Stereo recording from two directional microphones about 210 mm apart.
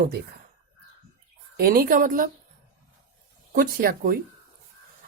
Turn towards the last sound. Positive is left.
turn(degrees=-45)  # may be behind; listen again after turning